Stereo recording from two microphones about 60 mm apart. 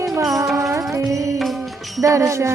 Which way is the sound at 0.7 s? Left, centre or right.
Right.